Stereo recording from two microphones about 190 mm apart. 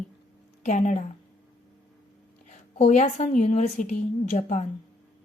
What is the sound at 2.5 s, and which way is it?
A woman's voice, 35° left (ahead or behind).